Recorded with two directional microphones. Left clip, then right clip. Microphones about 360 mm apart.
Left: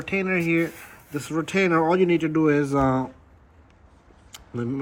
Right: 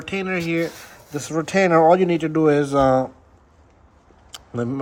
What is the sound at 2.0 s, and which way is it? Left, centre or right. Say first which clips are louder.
Speech: right 1 dB; right.